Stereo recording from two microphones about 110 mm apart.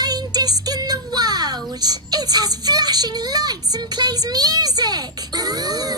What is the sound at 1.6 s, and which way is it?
Child singing, 35° right (ahead or behind).